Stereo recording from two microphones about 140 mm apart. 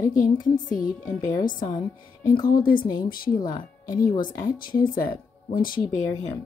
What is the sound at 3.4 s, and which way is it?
Speech, 75° left (ahead or behind).